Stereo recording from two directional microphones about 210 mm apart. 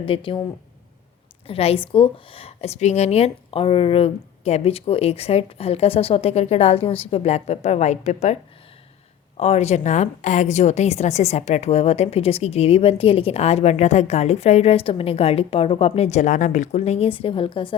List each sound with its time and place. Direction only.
0.0 s a woman's voice: 25° left (ahead or behind)
1.5 s a woman's voice: 30° left (ahead or behind)
9.4 s a woman's voice: 30° left (ahead or behind)